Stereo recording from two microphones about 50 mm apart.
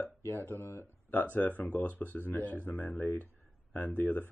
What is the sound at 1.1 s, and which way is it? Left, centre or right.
Speech, left.